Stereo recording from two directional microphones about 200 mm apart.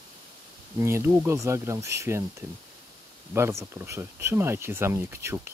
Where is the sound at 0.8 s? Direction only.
15° right (ahead or behind).